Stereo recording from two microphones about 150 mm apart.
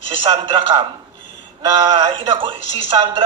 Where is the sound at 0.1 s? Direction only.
35° right (ahead or behind).